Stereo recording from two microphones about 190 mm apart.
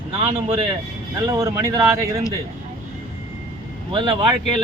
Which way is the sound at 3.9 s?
25° right (ahead or behind).